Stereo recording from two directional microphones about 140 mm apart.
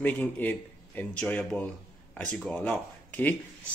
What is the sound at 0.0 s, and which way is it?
A man's voice, 15° left (ahead or behind).